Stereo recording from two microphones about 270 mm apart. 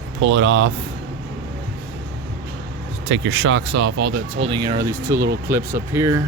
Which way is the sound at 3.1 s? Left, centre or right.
Right.